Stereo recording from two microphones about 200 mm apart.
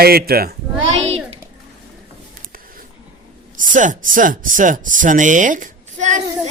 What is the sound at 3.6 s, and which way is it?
Speech, 40° right (ahead or behind).